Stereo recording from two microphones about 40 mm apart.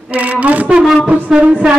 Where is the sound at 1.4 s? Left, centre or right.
Right.